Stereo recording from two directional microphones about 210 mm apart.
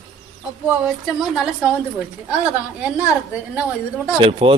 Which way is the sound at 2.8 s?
5° right (ahead or behind).